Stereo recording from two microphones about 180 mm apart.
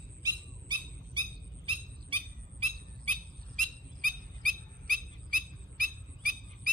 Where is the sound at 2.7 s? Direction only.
45° right (ahead or behind).